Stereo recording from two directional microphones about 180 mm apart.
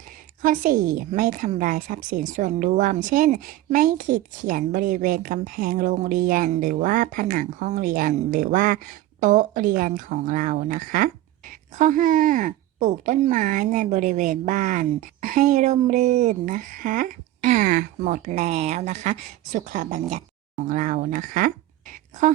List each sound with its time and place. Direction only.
0.4 s speech: 50° right (ahead or behind)